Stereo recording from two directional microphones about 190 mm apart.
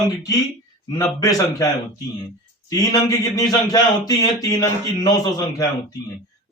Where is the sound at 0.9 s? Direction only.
20° left (ahead or behind).